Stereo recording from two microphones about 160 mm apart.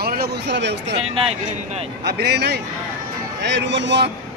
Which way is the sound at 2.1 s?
90° right.